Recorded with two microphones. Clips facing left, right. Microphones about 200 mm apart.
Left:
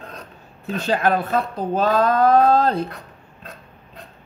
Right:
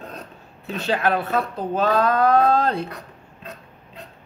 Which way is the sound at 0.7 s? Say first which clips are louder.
Left 2 dB; 45° left (ahead or behind).